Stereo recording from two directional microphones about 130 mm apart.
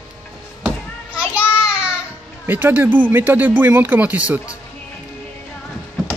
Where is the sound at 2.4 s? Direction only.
15° right (ahead or behind).